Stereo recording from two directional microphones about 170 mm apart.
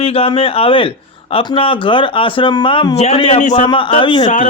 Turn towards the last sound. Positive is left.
turn(degrees=50)  # may be behind; listen again after turning